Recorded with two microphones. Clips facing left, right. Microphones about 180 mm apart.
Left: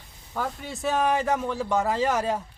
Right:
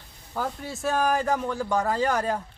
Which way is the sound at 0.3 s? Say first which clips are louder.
Even; 5° right (ahead or behind).